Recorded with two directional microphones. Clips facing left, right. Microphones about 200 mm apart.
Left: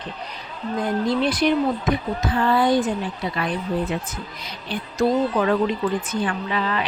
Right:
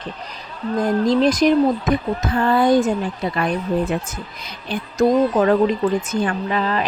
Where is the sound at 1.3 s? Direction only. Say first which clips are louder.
Right 5 dB; 40° right (ahead or behind).